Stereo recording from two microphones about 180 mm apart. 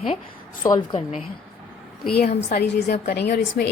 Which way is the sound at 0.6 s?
25° left (ahead or behind).